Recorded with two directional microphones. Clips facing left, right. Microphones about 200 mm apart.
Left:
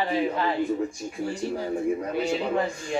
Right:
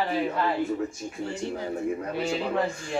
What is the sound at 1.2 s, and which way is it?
Speech, 20° right (ahead or behind).